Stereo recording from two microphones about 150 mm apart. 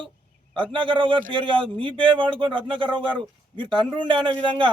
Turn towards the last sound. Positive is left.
turn(degrees=-35)  # may be behind; listen again after turning